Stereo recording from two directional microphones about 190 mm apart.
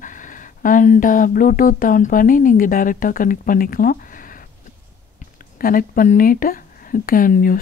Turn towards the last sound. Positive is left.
turn(degrees=45)  # may be behind; listen again after turning